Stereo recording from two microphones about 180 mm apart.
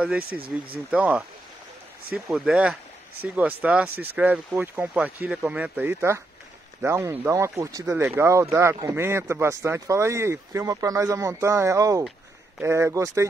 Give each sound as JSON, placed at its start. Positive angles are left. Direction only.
{"t": 0.0, "sound": "speech", "side_deg": -5}